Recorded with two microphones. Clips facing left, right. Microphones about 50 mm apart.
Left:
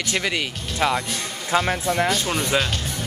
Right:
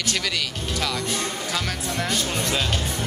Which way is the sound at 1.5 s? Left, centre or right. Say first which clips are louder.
Left 11 dB; left.